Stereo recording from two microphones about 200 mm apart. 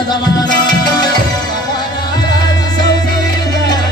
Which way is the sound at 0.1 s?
20° left (ahead or behind).